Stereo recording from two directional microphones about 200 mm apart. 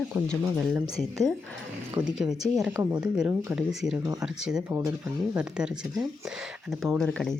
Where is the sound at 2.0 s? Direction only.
5° right (ahead or behind).